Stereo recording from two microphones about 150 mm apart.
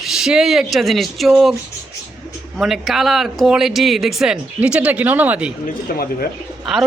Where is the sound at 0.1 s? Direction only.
5° right (ahead or behind).